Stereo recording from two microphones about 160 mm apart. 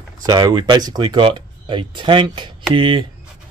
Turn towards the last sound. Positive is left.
turn(degrees=-30)  # may be behind; listen again after turning